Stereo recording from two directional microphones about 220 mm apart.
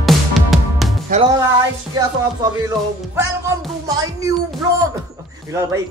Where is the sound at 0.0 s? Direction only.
Centre (ahead or behind).